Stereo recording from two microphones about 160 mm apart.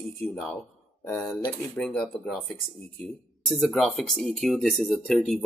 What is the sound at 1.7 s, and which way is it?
Speech, 5° left (ahead or behind).